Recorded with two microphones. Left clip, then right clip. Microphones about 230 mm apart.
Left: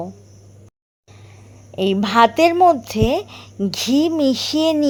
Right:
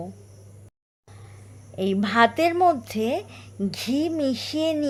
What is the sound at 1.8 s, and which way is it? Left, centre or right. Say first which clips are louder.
A woman's voice: left 6 dB; centre.